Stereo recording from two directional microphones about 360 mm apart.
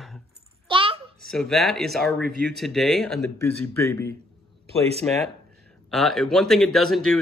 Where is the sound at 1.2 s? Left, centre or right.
Centre.